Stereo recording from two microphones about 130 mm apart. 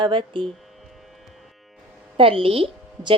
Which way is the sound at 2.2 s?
45° right (ahead or behind).